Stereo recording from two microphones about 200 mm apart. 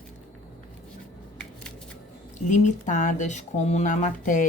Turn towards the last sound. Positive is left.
turn(degrees=40)  # may be behind; listen again after turning